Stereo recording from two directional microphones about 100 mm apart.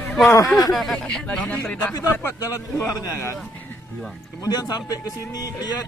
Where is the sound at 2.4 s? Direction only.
35° left (ahead or behind).